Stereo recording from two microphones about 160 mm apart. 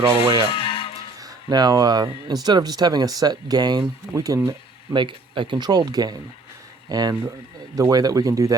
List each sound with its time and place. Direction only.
0.1 s speech: 30° right (ahead or behind)
0.5 s music: 35° left (ahead or behind)
1.2 s speech: 25° right (ahead or behind)